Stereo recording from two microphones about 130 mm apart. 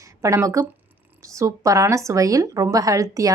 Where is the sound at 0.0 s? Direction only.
25° right (ahead or behind).